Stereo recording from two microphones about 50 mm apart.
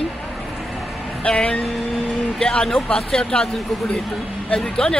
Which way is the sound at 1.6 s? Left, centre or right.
Centre.